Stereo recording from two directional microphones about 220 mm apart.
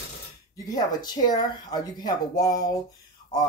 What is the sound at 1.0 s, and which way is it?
Speech, 20° left (ahead or behind).